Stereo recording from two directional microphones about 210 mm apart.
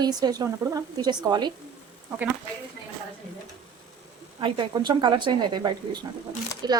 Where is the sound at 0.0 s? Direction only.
20° right (ahead or behind).